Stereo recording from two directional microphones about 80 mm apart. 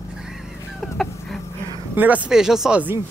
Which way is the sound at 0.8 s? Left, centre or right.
Centre.